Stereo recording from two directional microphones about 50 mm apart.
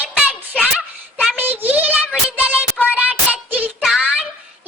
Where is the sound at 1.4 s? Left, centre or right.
Right.